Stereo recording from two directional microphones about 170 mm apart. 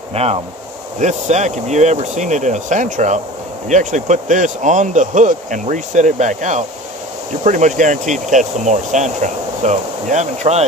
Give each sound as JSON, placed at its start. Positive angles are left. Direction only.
{"t": 0.1, "sound": "speech", "side_deg": -40}